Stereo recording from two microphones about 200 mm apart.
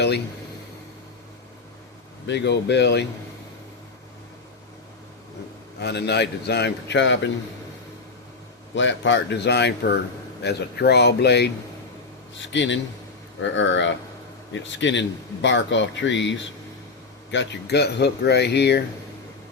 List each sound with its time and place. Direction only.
2.2 s speech: 60° left (ahead or behind)
5.8 s speech: 55° left (ahead or behind)
8.7 s speech: 65° left (ahead or behind)
12.5 s speech: 65° left (ahead or behind)